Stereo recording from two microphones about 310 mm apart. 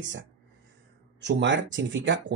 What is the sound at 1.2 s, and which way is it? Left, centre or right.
Speech, right.